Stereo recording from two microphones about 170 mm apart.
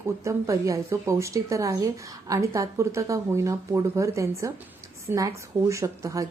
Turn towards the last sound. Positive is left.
turn(degrees=-15)  # may be behind; listen again after turning